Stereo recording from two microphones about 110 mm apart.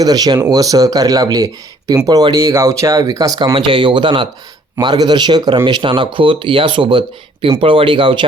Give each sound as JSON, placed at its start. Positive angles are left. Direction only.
{"t": 0.0, "sound": "speech", "side_deg": -35}